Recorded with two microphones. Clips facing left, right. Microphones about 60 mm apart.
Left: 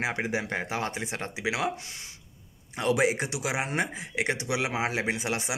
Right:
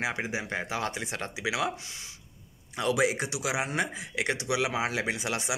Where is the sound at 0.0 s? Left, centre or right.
Left.